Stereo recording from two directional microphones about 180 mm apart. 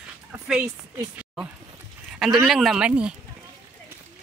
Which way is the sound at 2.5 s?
Centre (ahead or behind).